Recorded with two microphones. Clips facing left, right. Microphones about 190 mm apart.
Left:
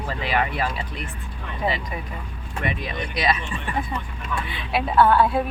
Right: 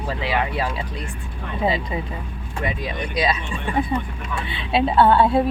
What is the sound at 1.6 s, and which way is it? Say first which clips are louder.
Speech: right 4 dB; 25° right (ahead or behind).